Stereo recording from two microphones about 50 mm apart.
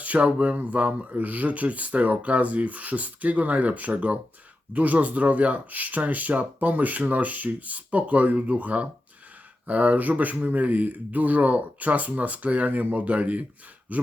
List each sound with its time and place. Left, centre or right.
0.0 s speech: right